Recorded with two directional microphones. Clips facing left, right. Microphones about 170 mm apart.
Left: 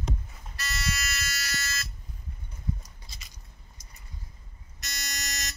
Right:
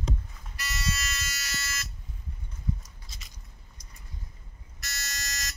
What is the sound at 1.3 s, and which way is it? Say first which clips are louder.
Fire alarm: left 3 dB; 20° right (ahead or behind).